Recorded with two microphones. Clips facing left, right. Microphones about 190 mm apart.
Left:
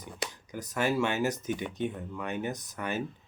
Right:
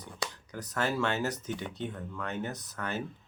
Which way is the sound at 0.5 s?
15° left (ahead or behind).